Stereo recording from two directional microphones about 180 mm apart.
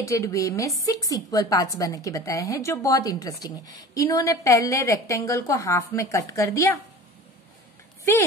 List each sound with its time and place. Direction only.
0.0 s a woman's voice: 15° left (ahead or behind)
8.0 s speech: 15° left (ahead or behind)